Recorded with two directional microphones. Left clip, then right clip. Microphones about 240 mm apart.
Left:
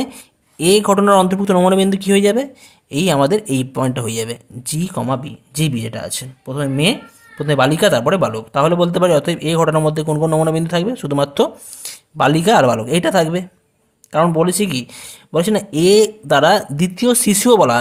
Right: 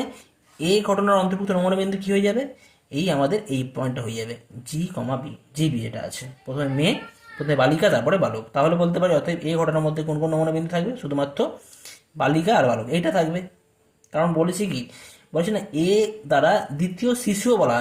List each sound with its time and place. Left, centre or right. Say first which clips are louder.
0.6 s speech: left 8 dB; left